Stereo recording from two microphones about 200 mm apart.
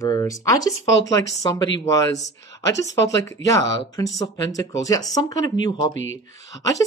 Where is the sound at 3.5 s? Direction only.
15° left (ahead or behind).